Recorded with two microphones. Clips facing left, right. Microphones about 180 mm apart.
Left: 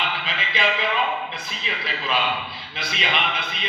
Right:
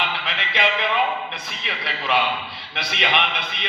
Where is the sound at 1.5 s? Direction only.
65° right (ahead or behind).